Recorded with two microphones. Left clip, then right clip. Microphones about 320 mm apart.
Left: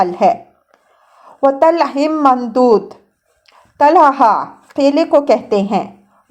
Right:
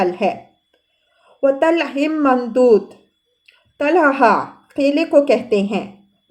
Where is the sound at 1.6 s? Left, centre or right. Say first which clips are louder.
Left 5 dB; centre.